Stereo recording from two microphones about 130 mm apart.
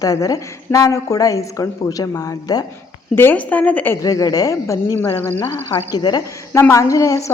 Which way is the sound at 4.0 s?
25° left (ahead or behind).